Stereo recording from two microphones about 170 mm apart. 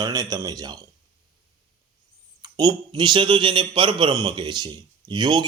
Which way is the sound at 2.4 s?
25° right (ahead or behind).